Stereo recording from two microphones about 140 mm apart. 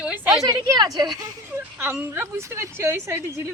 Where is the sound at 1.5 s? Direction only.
15° right (ahead or behind).